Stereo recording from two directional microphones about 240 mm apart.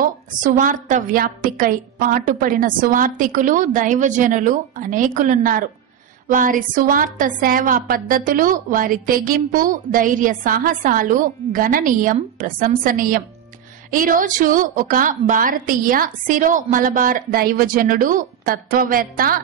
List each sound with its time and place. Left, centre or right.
0.0 s a woman's voice: right